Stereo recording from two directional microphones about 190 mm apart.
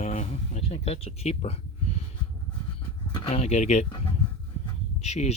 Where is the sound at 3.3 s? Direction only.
35° left (ahead or behind).